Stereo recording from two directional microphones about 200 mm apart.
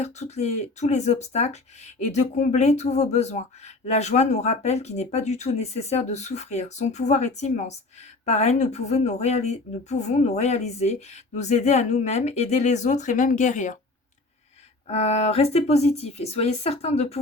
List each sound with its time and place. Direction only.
0.0 s speech: 35° left (ahead or behind)
14.8 s speech: 30° left (ahead or behind)